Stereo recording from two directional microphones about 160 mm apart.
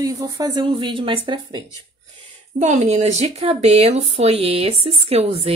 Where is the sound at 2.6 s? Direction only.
45° right (ahead or behind).